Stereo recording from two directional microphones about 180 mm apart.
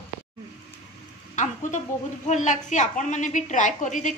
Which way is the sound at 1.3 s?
40° left (ahead or behind).